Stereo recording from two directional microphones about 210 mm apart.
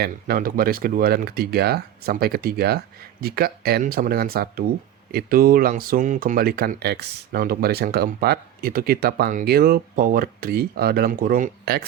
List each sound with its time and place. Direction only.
0.0 s speech: 45° right (ahead or behind)